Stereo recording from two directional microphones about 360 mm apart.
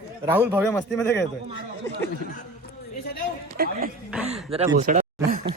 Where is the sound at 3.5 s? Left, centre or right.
Right.